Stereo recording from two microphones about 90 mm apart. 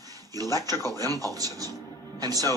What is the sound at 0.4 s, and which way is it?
Speech, 45° right (ahead or behind).